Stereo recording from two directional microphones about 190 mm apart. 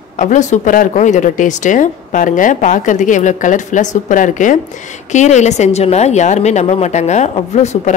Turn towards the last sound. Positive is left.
turn(degrees=35)  # may be behind; listen again after turning